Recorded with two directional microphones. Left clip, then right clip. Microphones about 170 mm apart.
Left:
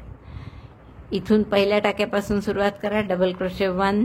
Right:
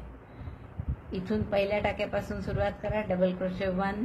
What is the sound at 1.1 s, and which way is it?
A woman's voice, 50° left (ahead or behind).